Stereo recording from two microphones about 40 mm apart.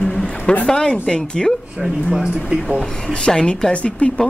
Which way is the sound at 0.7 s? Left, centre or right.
Centre.